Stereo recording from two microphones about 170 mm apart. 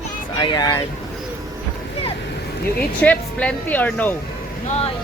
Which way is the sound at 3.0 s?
10° left (ahead or behind).